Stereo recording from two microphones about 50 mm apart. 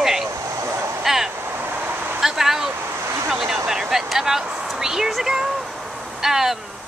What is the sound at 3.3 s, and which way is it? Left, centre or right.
Speech, centre.